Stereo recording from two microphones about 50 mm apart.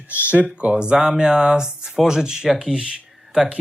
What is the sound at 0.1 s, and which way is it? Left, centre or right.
Speech, right.